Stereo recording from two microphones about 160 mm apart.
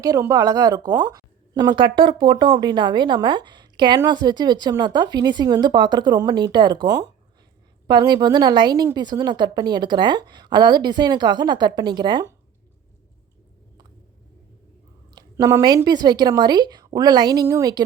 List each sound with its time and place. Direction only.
0.0 s speech: 20° right (ahead or behind)
15.1 s speech: 25° right (ahead or behind)